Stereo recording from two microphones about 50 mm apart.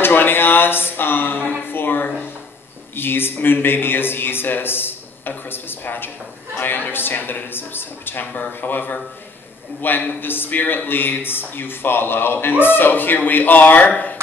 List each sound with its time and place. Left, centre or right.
0.0 s a man's voice: left